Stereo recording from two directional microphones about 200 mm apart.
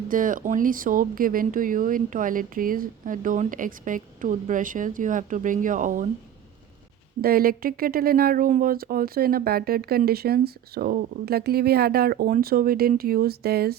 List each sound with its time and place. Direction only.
0.1 s speech: 45° right (ahead or behind)
7.2 s speech: 50° right (ahead or behind)